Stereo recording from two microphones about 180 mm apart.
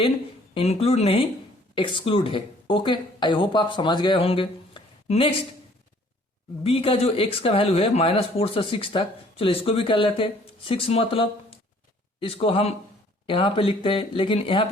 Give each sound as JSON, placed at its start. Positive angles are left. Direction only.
{"t": 0.5, "sound": "speech", "side_deg": 35}
{"t": 6.6, "sound": "speech", "side_deg": 30}